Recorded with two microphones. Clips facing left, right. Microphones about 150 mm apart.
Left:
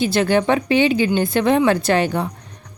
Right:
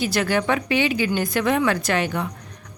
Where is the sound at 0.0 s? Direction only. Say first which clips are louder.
Left 5 dB; 25° left (ahead or behind).